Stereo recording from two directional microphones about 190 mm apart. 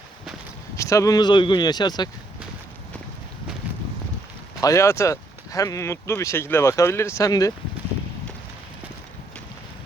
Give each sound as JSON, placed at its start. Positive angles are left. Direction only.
{"t": 0.8, "sound": "speech", "side_deg": 15}
{"t": 4.6, "sound": "speech", "side_deg": 15}